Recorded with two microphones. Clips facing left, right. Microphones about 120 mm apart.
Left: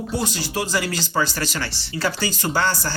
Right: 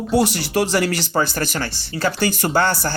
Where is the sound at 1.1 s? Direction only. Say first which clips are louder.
Right 3 dB; 50° right (ahead or behind).